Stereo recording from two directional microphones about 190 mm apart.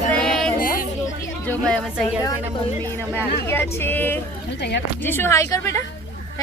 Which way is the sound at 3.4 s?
10° left (ahead or behind).